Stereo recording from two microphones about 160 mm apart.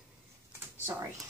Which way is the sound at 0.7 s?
15° right (ahead or behind).